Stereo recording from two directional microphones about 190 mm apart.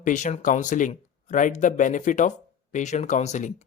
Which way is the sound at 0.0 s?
40° left (ahead or behind).